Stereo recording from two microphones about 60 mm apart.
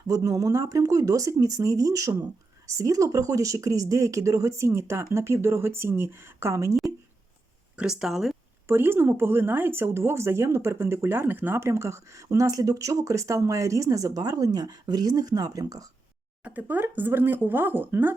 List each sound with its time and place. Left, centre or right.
0.2 s a woman's voice: right
7.8 s speech: centre
8.6 s a woman's voice: right
16.4 s speech: right